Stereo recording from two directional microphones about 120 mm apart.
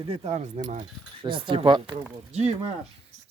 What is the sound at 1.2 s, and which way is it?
Speech, 45° right (ahead or behind).